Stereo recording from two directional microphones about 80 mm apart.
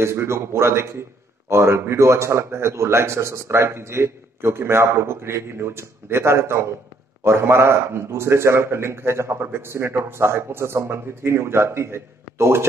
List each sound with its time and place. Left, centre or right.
0.0 s a man's voice: right